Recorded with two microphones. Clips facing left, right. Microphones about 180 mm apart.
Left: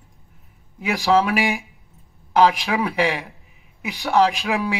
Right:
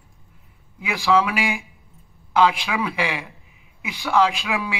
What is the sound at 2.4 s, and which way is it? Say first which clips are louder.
A man's voice: left 2 dB; 40° left (ahead or behind).